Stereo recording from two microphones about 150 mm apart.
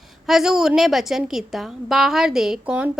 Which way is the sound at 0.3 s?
Centre (ahead or behind).